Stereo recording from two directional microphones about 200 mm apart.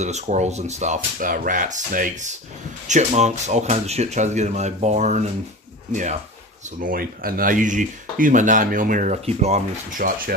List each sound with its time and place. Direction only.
0.0 s speech: 35° right (ahead or behind)